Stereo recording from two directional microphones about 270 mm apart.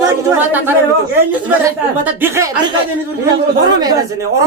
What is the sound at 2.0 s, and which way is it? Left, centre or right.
Speech, centre.